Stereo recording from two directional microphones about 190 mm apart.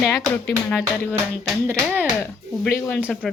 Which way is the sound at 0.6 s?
5° left (ahead or behind).